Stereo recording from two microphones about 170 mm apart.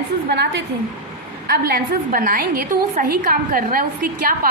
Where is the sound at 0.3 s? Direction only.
75° right (ahead or behind).